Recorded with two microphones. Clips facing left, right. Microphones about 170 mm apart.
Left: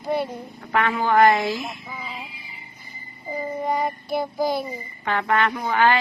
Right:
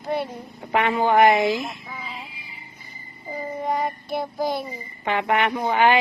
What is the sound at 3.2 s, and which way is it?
Child singing, centre (ahead or behind).